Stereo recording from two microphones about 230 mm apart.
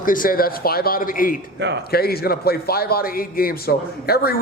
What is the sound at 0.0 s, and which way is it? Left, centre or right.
A man's voice, left.